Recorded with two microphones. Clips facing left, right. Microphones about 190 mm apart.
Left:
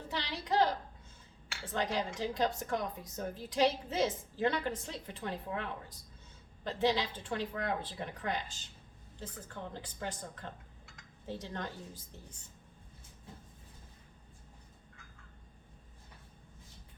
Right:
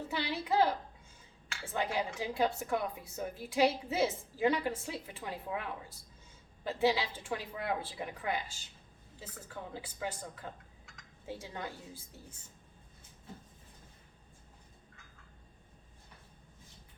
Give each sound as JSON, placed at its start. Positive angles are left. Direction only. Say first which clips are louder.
{"t": 0.1, "sound": "a sound", "louder": "right 1 dB", "side_deg": -5}
{"t": 1.6, "sound": "a woman's voice", "louder": "even", "side_deg": -10}
{"t": 6.7, "sound": "a woman's voice", "louder": "right 1 dB", "side_deg": -10}